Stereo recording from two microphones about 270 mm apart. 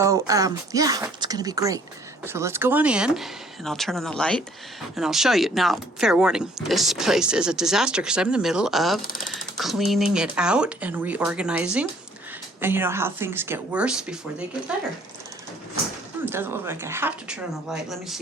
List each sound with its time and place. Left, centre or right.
0.0 s speech: centre
9.0 s speech: left
9.3 s speech: centre
16.2 s speech: centre